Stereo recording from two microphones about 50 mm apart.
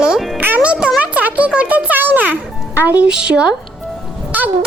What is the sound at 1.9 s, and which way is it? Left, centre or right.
Music, right.